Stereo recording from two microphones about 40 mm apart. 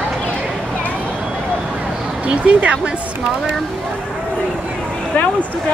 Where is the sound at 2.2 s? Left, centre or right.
Right.